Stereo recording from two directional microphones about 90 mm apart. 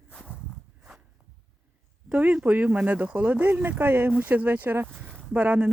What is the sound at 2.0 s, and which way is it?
Speech, 20° right (ahead or behind).